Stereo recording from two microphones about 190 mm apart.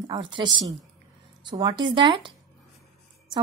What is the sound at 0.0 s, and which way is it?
A woman's voice, 25° right (ahead or behind).